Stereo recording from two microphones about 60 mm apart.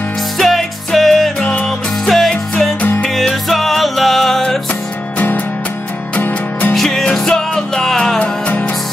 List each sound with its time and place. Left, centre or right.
0.4 s music: centre
1.4 s music: left
2.0 s music: centre
6.7 s music: centre
8.2 s music: left